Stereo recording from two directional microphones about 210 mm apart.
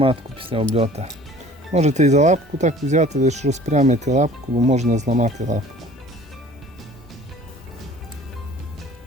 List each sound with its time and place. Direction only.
0.0 s speech: 25° right (ahead or behind)